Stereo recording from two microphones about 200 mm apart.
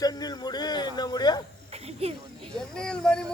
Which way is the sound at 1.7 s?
30° right (ahead or behind).